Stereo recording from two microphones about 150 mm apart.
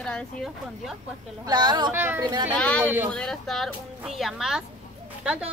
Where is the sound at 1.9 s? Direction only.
15° right (ahead or behind).